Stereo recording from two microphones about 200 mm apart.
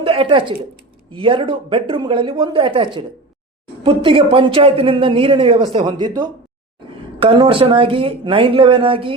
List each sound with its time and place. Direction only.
0.0 s speech: 25° right (ahead or behind)